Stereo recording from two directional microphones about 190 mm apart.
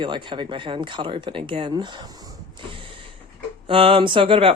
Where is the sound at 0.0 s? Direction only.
25° right (ahead or behind).